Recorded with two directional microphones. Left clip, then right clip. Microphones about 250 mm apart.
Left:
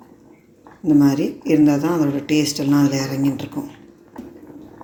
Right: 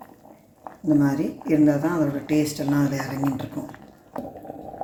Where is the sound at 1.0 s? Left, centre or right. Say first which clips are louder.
Left 8 dB; centre.